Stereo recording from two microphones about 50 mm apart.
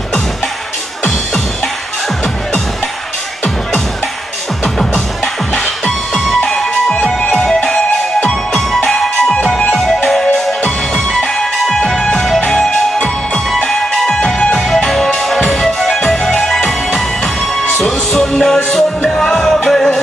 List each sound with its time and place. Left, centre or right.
4.7 s music: centre
7.2 s music: left
7.4 s music: centre
17.7 s music: centre